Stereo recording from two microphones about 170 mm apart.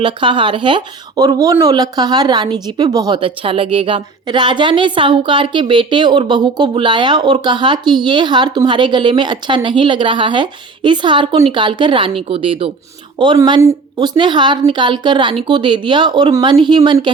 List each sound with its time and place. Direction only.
0.0 s speech: 30° right (ahead or behind)